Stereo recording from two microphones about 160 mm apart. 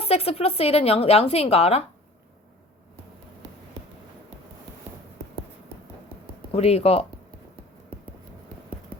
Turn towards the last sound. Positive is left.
turn(degrees=40)  # may be behind; listen again after turning